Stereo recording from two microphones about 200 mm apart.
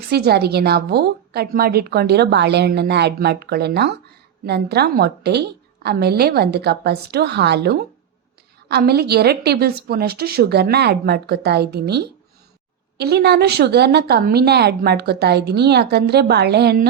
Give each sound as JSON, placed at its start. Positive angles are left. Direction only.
{"t": 0.1, "sound": "a woman's voice", "side_deg": -55}